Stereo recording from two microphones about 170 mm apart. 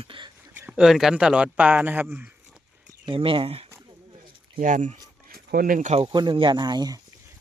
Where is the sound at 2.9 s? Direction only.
30° right (ahead or behind).